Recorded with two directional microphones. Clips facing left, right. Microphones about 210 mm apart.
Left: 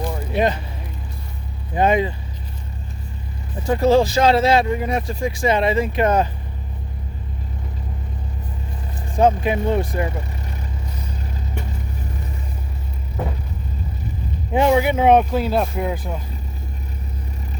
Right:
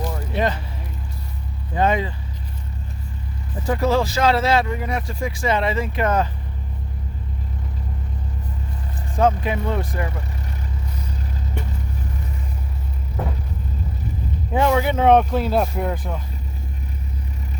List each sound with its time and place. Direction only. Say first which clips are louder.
0.1 s a sound: left 5 dB; 15° left (ahead or behind)
1.7 s speech: left 3 dB; 15° left (ahead or behind)
3.8 s speech: left 4 dB; 20° left (ahead or behind)
9.1 s speech: left 3 dB; 15° left (ahead or behind)
14.5 s speech: left 3 dB; 15° left (ahead or behind)